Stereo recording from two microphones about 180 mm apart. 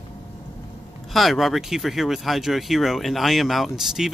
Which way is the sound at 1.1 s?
Centre (ahead or behind).